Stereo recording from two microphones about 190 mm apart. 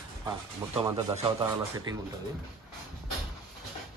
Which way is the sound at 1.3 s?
20° right (ahead or behind).